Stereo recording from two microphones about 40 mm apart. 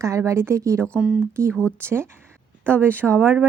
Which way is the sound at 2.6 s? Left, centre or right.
Right.